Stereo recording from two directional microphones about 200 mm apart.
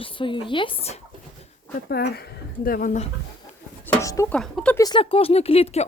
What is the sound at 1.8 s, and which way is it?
Speech, 55° left (ahead or behind).